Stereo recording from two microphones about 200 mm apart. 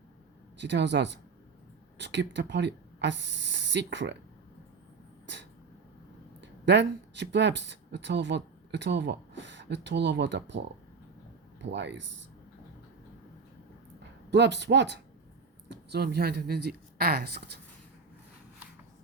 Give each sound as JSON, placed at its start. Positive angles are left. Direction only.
{"t": 0.6, "sound": "speech", "side_deg": -60}
{"t": 5.2, "sound": "a sound", "side_deg": -60}
{"t": 6.4, "sound": "speech", "side_deg": -60}
{"t": 11.6, "sound": "speech", "side_deg": -60}
{"t": 14.3, "sound": "speech", "side_deg": -60}